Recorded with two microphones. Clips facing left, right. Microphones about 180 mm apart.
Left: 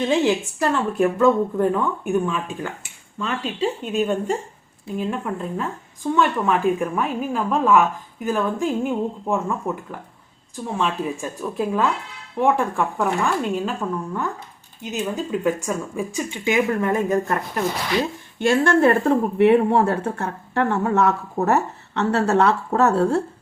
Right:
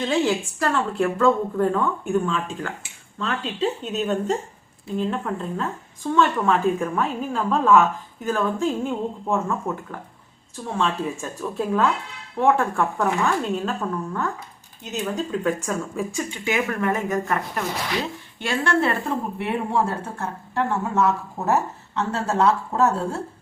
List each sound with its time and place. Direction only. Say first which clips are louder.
0.0 s a woman's voice: left 2 dB; 20° left (ahead or behind)
18.3 s speech: left 6 dB; 50° left (ahead or behind); by 23.2 s 70° left (ahead or behind)